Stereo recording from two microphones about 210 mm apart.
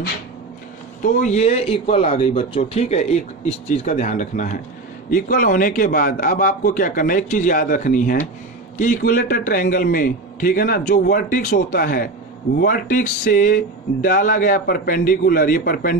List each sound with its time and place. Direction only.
1.0 s a man's voice: 35° left (ahead or behind)